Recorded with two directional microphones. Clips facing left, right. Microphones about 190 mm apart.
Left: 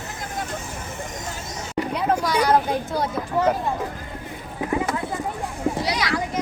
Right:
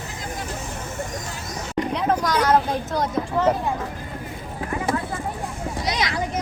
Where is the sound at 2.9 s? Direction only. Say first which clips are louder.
Right 3 dB; 10° left (ahead or behind).